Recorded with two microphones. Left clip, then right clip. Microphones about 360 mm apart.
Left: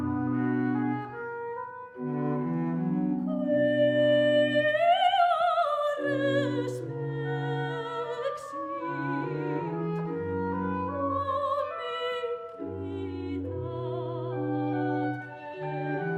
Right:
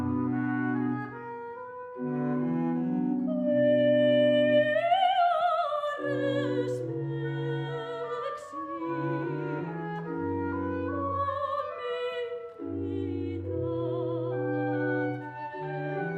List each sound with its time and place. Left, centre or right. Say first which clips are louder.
0.3 s music: left 2 dB; centre
3.6 s music: right 1 dB; left
14.7 s music: even; left